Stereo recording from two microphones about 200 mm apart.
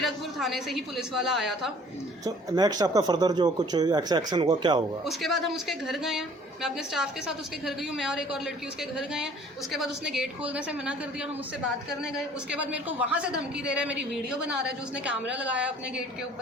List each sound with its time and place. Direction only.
0.0 s a woman's voice: centre (ahead or behind)
2.2 s speech: 20° right (ahead or behind)
5.0 s a woman's voice: centre (ahead or behind)